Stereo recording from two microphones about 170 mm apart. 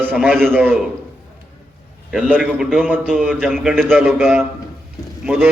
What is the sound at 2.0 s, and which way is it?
A man's voice, 5° right (ahead or behind).